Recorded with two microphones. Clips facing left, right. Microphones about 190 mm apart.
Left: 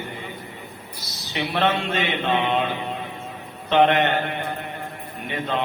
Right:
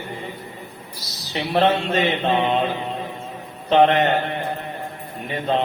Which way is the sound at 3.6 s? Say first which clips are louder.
Right 2 dB; 35° right (ahead or behind).